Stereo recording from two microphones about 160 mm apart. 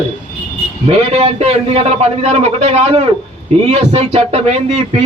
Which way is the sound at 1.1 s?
35° right (ahead or behind).